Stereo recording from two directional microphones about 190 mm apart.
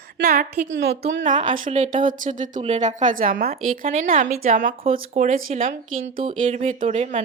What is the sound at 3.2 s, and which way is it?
Speech, 50° right (ahead or behind).